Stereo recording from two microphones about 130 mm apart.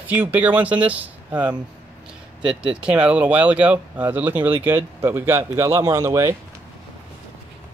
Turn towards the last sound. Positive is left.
turn(degrees=-20)  # may be behind; listen again after turning